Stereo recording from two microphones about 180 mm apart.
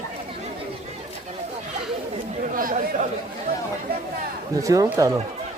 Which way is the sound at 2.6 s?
50° right (ahead or behind).